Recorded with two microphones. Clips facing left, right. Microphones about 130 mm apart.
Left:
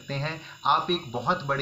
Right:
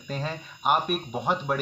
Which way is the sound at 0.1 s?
10° right (ahead or behind).